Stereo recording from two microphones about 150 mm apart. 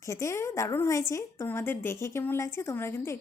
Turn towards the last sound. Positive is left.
turn(degrees=15)  # may be behind; listen again after turning